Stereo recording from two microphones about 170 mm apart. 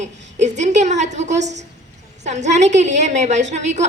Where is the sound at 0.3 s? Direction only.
45° right (ahead or behind).